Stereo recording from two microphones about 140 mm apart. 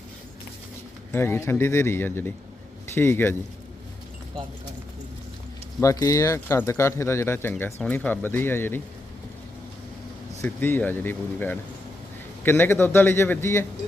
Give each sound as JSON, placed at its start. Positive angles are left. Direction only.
{"t": 1.1, "sound": "a man's voice", "side_deg": 15}
{"t": 5.8, "sound": "a man's voice", "side_deg": 25}
{"t": 10.4, "sound": "a man's voice", "side_deg": 10}